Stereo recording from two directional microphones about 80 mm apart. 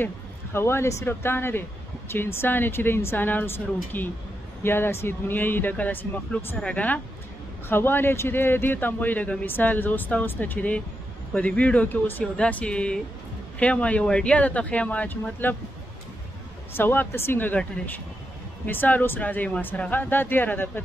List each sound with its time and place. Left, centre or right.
0.0 s speech: left
16.7 s speech: left
17.8 s speech: centre
18.7 s speech: left